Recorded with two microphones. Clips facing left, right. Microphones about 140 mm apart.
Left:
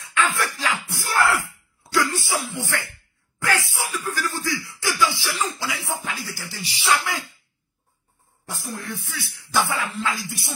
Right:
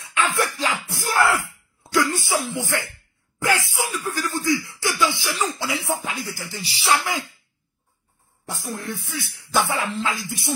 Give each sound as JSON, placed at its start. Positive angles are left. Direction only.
{"t": 0.0, "sound": "music", "side_deg": -20}
{"t": 1.8, "sound": "a sound", "side_deg": -20}
{"t": 3.7, "sound": "speech", "side_deg": -20}
{"t": 6.6, "sound": "speech", "side_deg": -30}
{"t": 8.5, "sound": "speech", "side_deg": -25}